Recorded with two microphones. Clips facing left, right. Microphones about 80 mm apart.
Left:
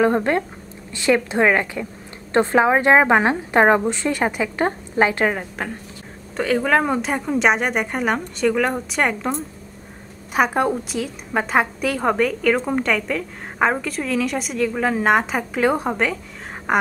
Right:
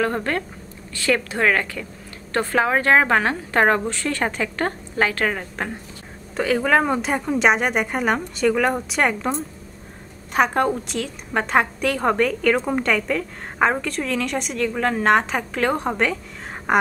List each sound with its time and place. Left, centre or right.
0.0 s a woman's voice: centre
6.3 s a woman's voice: centre
10.3 s a woman's voice: centre